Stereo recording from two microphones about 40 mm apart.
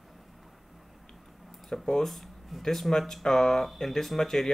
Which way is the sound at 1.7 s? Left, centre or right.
Centre.